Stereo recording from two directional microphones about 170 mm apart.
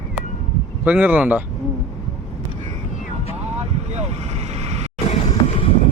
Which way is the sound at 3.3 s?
40° right (ahead or behind).